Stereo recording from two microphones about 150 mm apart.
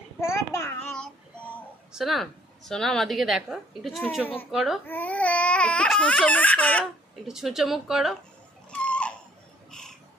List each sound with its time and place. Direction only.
0.2 s child singing: 20° left (ahead or behind)
1.9 s a woman's voice: centre (ahead or behind)
4.9 s speech: 10° left (ahead or behind)
7.3 s a woman's voice: 5° right (ahead or behind)
8.7 s a sound: 10° left (ahead or behind)